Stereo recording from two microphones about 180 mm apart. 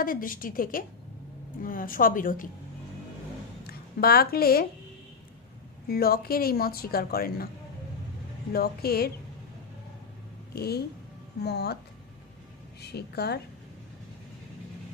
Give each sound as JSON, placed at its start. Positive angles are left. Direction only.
{"t": 0.0, "sound": "a woman's voice", "side_deg": 50}
{"t": 3.6, "sound": "a woman's voice", "side_deg": 60}
{"t": 5.9, "sound": "speech", "side_deg": 60}
{"t": 8.5, "sound": "speech", "side_deg": 60}
{"t": 10.5, "sound": "speech", "side_deg": 60}
{"t": 12.8, "sound": "speech", "side_deg": 65}